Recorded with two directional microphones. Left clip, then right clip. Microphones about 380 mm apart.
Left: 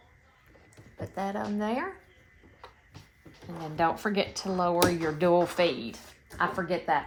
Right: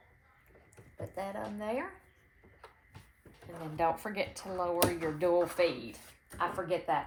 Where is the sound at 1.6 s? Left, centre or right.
Left.